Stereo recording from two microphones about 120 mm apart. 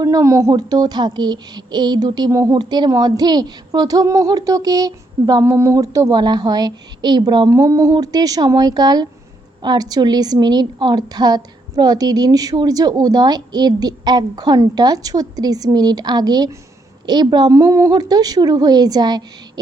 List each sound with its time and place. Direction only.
0.0 s speech: 25° right (ahead or behind)